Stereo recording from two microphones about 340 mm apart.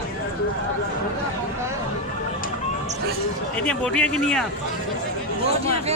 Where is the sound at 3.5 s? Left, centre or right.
Centre.